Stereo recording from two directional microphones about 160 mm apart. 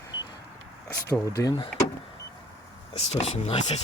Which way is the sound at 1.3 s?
25° left (ahead or behind).